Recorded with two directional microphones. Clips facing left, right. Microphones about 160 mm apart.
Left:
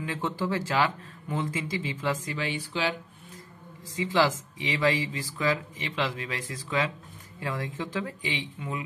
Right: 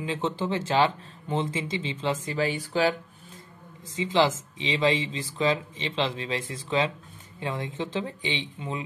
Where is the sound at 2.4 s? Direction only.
45° right (ahead or behind).